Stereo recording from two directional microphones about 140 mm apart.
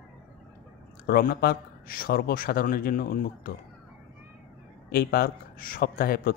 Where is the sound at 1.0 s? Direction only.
90° left.